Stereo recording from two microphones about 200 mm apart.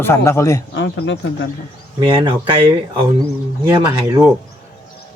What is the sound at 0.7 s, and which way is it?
Speech, 65° left (ahead or behind).